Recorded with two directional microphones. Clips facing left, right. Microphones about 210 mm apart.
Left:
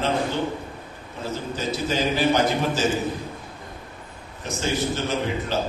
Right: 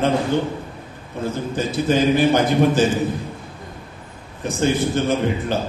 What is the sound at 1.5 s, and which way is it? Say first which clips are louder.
A man's voice: right 7 dB; 55° right (ahead or behind).